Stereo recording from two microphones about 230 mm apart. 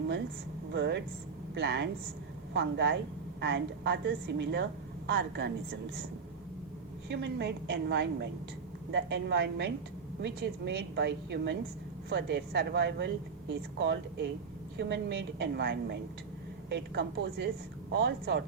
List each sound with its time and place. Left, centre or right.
0.7 s a woman's voice: right
7.1 s a woman's voice: right